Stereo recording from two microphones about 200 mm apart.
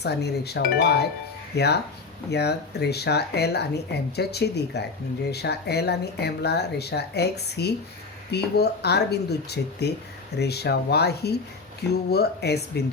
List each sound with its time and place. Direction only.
0.0 s speech: 55° left (ahead or behind)